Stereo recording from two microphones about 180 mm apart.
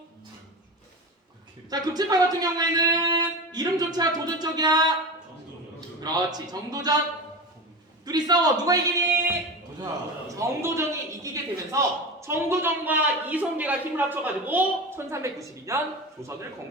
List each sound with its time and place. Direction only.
1.7 s speech: 20° right (ahead or behind)
6.0 s speech: 20° right (ahead or behind)
8.0 s speech: 20° right (ahead or behind)
9.2 s a sound: 15° right (ahead or behind)
9.8 s a man's voice: 20° right (ahead or behind)